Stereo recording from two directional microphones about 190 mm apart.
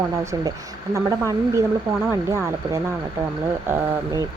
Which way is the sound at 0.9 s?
15° right (ahead or behind).